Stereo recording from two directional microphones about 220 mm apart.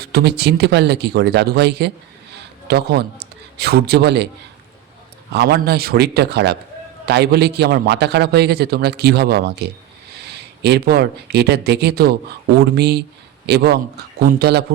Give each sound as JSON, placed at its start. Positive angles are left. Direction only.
{"t": 0.0, "sound": "a man's voice", "side_deg": -45}
{"t": 5.3, "sound": "a man's voice", "side_deg": -45}